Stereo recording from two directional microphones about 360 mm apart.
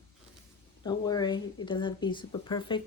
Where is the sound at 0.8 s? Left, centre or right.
Centre.